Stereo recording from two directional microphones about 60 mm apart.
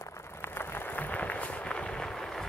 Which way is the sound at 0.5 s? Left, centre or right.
Left.